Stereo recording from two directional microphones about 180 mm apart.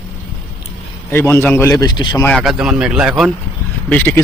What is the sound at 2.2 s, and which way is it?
Speech, 5° left (ahead or behind).